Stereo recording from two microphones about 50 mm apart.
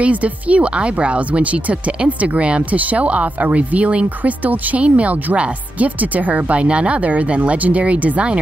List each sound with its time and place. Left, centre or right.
0.0 s speech: right